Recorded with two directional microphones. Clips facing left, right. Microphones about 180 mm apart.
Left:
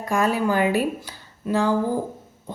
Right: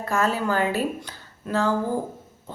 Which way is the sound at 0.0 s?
15° left (ahead or behind).